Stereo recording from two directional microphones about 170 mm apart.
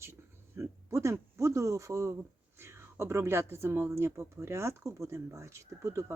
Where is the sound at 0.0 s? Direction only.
15° right (ahead or behind).